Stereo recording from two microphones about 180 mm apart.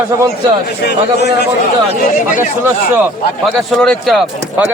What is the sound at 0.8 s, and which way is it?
Speech, 65° left (ahead or behind).